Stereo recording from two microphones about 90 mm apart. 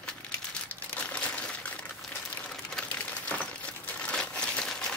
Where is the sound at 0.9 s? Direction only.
15° left (ahead or behind).